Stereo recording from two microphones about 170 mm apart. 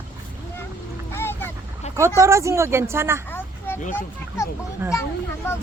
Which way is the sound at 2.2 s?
15° right (ahead or behind).